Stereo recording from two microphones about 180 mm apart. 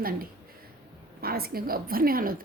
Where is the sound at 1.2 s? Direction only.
55° right (ahead or behind).